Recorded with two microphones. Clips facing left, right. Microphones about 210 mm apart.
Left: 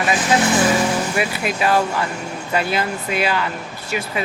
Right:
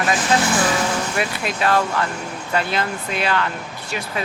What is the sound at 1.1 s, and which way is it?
Speech, 5° left (ahead or behind).